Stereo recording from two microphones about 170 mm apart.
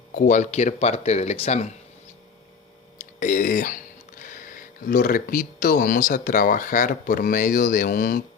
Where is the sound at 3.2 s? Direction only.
50° left (ahead or behind).